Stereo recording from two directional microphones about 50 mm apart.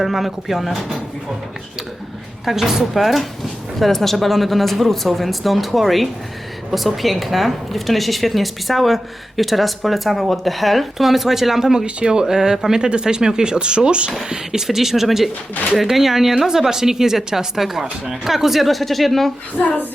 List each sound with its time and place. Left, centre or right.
0.0 s speech: centre
2.4 s speech: centre
14.2 s speech: centre
19.6 s speech: left